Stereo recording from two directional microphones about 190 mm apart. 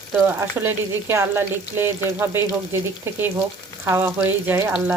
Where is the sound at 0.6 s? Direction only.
15° right (ahead or behind).